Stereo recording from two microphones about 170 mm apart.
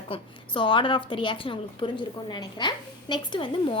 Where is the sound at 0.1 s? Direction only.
30° left (ahead or behind).